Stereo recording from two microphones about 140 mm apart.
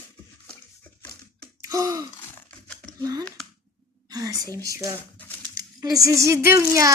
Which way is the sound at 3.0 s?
25° right (ahead or behind).